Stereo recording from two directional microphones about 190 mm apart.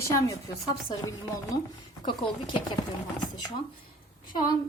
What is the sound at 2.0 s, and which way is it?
Speech, 25° left (ahead or behind).